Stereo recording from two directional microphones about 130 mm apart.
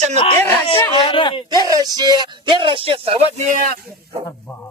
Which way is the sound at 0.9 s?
45° left (ahead or behind).